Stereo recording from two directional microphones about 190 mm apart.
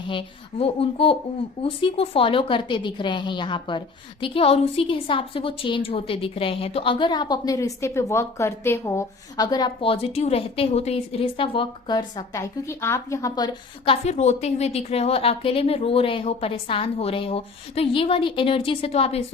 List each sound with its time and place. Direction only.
0.1 s a woman's voice: 30° left (ahead or behind)